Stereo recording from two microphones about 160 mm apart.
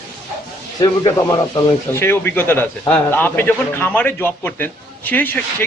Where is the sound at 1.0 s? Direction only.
20° left (ahead or behind).